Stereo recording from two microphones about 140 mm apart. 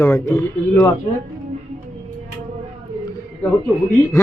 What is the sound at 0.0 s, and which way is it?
Speech, 20° left (ahead or behind).